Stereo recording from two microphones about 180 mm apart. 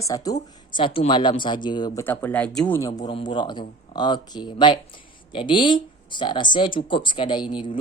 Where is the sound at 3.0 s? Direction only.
25° left (ahead or behind).